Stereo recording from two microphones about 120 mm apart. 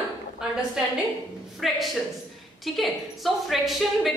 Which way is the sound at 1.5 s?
Centre (ahead or behind).